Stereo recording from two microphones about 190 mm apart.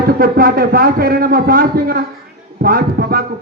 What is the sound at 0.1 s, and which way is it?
Speech, 50° right (ahead or behind).